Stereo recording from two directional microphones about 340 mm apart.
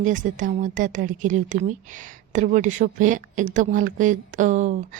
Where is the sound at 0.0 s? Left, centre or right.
Right.